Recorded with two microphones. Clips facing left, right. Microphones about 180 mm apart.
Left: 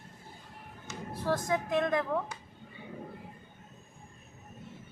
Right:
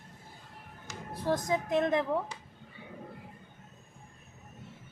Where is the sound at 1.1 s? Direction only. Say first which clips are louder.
Right 1 dB; 20° right (ahead or behind).